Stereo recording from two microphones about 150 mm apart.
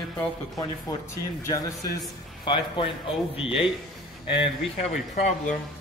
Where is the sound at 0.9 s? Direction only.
20° left (ahead or behind).